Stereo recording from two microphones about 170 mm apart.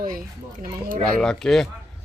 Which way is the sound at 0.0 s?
55° right (ahead or behind).